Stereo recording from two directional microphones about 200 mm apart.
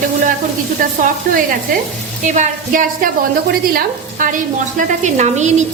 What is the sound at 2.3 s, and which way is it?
A woman's voice, 40° right (ahead or behind).